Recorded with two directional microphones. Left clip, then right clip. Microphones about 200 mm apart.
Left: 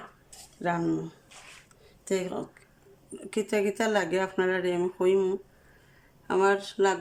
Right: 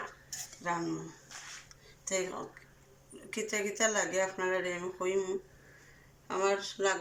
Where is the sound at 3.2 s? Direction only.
55° left (ahead or behind).